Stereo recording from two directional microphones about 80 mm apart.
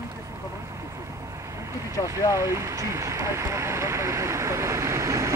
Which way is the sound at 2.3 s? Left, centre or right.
Right.